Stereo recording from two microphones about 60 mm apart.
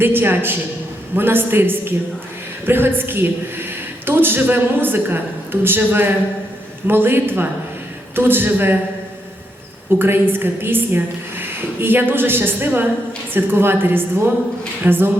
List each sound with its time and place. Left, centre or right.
0.0 s a woman's voice: right
10.0 s a woman's voice: right